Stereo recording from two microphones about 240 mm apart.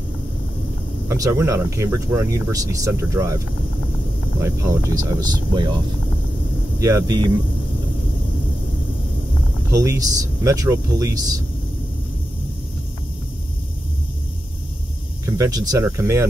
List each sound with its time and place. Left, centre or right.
1.0 s speech: centre
4.4 s speech: centre
6.8 s speech: centre
9.7 s speech: centre
15.2 s speech: centre